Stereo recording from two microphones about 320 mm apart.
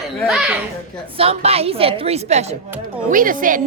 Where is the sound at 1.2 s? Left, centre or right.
Centre.